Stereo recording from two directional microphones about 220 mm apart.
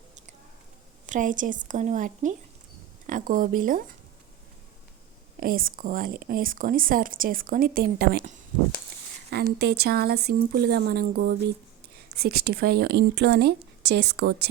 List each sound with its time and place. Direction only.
1.0 s speech: 35° right (ahead or behind)
5.4 s speech: 40° right (ahead or behind)
9.3 s speech: 45° right (ahead or behind)